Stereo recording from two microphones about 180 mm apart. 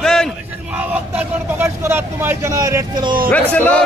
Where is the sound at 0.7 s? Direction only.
10° right (ahead or behind).